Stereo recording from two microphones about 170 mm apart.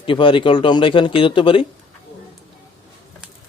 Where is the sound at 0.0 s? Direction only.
30° left (ahead or behind).